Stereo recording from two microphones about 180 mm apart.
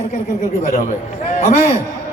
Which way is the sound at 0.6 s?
45° left (ahead or behind).